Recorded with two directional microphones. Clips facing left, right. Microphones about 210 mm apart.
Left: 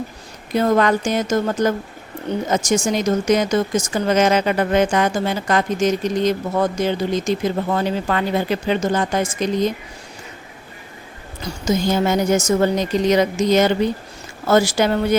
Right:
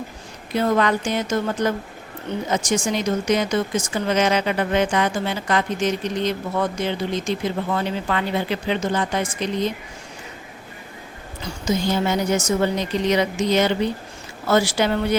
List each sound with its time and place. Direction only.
0.5 s speech: 45° left (ahead or behind)
11.4 s speech: 45° left (ahead or behind)